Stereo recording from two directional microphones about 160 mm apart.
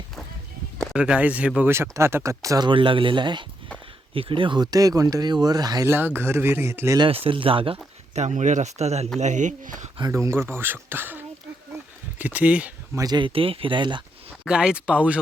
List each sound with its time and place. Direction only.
0.9 s speech: 5° right (ahead or behind)
7.0 s speech: 35° right (ahead or behind)
8.1 s speech: 45° right (ahead or behind)
10.0 s speech: 15° right (ahead or behind)
13.0 s speech: 25° right (ahead or behind)
14.4 s speech: 5° right (ahead or behind)